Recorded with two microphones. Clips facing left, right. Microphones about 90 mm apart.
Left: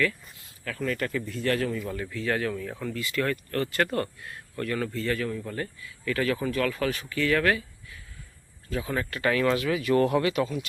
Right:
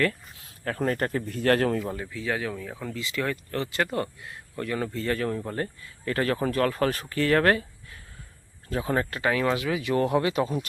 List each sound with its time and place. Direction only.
0.6 s speech: 40° right (ahead or behind)
2.0 s speech: 10° right (ahead or behind)
4.9 s speech: 35° right (ahead or behind)
9.2 s speech: 15° right (ahead or behind)